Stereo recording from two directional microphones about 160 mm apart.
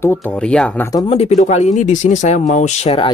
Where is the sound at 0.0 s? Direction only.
10° left (ahead or behind).